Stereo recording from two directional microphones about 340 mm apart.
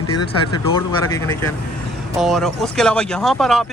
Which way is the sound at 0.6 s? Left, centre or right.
Centre.